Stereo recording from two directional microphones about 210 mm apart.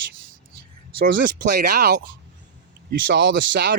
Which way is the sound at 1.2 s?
50° right (ahead or behind).